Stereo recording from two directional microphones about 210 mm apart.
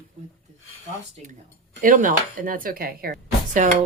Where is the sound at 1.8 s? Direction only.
40° right (ahead or behind).